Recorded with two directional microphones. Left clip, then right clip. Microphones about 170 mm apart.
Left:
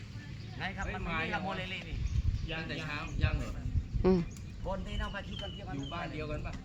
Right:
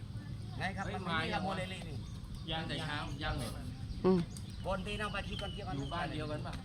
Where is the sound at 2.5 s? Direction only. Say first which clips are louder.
Even; 20° left (ahead or behind).